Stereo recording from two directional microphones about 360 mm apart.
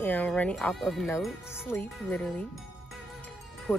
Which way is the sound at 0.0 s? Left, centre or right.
Centre.